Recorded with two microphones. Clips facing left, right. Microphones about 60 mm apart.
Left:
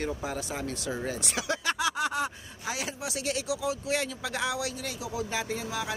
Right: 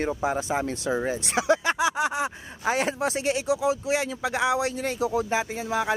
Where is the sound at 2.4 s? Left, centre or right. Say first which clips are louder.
Right 9 dB; right.